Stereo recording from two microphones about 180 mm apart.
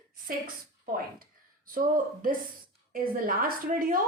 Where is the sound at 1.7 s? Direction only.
50° right (ahead or behind).